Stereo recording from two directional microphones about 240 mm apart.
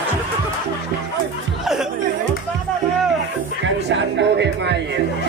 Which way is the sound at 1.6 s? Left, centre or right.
Centre.